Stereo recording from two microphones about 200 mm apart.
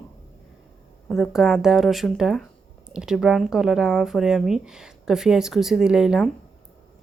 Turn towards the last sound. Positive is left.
turn(degrees=-5)  # may be behind; listen again after turning